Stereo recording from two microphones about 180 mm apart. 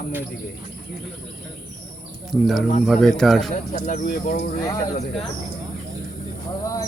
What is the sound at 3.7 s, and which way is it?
Speech, 45° left (ahead or behind).